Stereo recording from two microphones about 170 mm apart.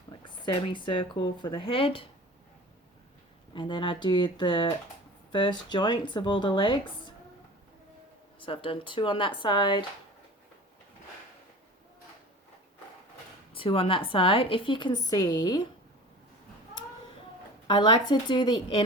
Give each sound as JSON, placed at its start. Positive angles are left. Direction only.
{"t": 0.4, "sound": "speech", "side_deg": 30}
{"t": 3.5, "sound": "speech", "side_deg": 30}
{"t": 8.4, "sound": "speech", "side_deg": 30}
{"t": 13.5, "sound": "a woman's voice", "side_deg": 30}
{"t": 17.7, "sound": "speech", "side_deg": 25}